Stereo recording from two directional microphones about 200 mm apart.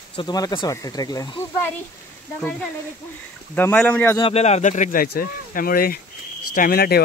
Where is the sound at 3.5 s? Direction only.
10° left (ahead or behind).